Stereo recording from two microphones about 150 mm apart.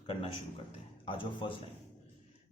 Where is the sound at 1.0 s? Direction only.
35° left (ahead or behind).